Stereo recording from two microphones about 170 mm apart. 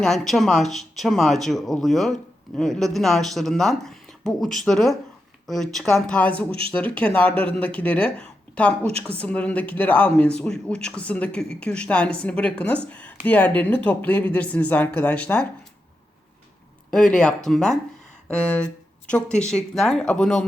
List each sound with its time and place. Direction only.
0.0 s speech: centre (ahead or behind)
6.5 s speech: 35° right (ahead or behind)
6.7 s a man's voice: 10° left (ahead or behind)
16.9 s a man's voice: 5° left (ahead or behind)